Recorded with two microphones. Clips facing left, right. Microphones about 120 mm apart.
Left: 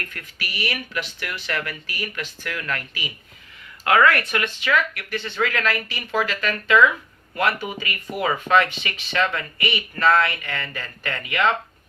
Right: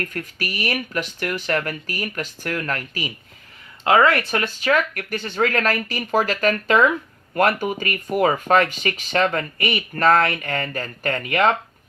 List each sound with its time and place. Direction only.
0.0 s speech: 40° right (ahead or behind)
3.8 s speech: 25° right (ahead or behind); by 11.5 s 45° right (ahead or behind)